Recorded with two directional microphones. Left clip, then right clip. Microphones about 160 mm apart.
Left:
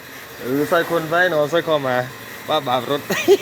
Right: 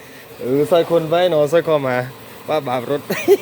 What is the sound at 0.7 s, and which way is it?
Speech, 55° right (ahead or behind).